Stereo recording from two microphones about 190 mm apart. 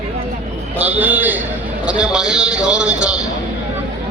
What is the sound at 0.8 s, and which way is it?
A man's voice, 10° right (ahead or behind).